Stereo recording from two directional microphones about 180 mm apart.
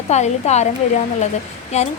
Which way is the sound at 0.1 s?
40° left (ahead or behind).